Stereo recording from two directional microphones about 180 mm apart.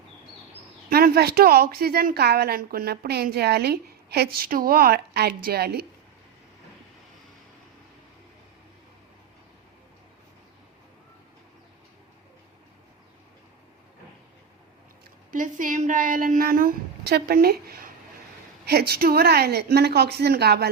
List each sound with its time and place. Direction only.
0.9 s a woman's voice: 55° right (ahead or behind)
15.3 s a woman's voice: 45° right (ahead or behind); by 20.7 s 65° right (ahead or behind)